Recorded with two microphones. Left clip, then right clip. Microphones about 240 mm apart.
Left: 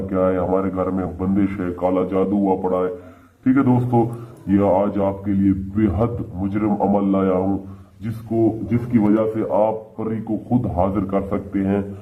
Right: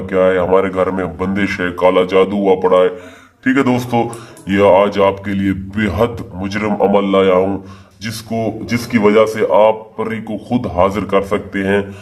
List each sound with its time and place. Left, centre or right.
0.1 s a man's voice: right
9.0 s speech: right
9.6 s a man's voice: right